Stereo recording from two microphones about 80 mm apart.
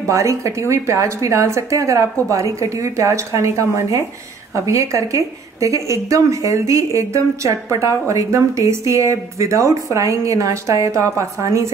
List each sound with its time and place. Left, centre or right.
0.1 s a woman's voice: right